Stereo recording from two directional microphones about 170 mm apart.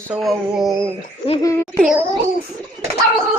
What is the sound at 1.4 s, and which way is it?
Speech, 20° left (ahead or behind).